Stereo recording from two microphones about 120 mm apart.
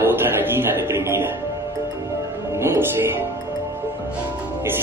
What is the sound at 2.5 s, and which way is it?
Music, 20° right (ahead or behind).